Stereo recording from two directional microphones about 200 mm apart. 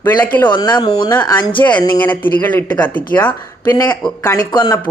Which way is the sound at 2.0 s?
10° left (ahead or behind).